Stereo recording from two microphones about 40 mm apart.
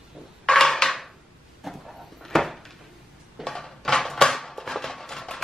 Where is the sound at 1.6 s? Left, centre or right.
Centre.